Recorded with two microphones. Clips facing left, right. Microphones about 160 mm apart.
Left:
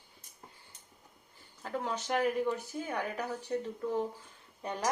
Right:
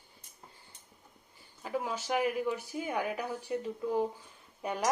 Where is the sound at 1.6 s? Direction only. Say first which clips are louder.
Right 1 dB; 10° right (ahead or behind).